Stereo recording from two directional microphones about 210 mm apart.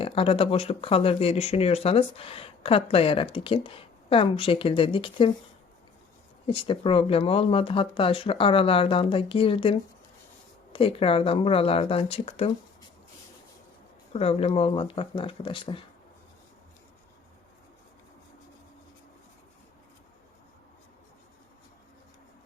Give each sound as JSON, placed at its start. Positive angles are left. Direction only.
{"t": 0.0, "sound": "speech", "side_deg": 25}
{"t": 6.5, "sound": "speech", "side_deg": 25}
{"t": 14.1, "sound": "speech", "side_deg": 30}